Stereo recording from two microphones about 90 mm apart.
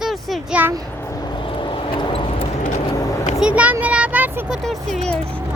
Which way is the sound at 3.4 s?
15° right (ahead or behind).